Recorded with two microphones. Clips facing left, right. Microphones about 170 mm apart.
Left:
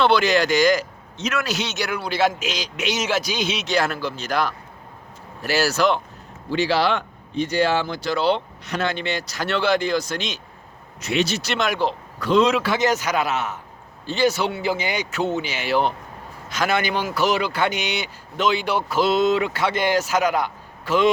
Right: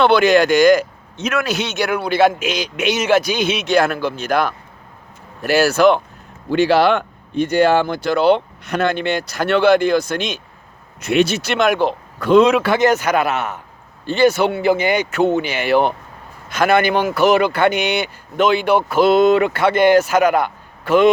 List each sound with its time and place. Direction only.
0.0 s speech: 55° right (ahead or behind)